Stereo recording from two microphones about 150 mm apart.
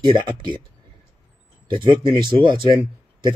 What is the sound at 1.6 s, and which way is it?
Speech, 30° right (ahead or behind).